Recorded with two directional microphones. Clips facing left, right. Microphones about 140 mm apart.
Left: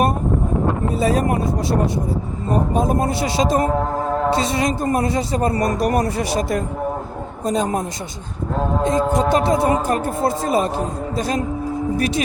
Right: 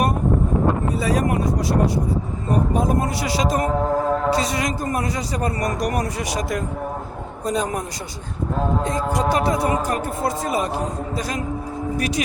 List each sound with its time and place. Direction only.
0.9 s a man's voice: 25° left (ahead or behind)
2.7 s a man's voice: 25° left (ahead or behind)
8.8 s a man's voice: 25° left (ahead or behind)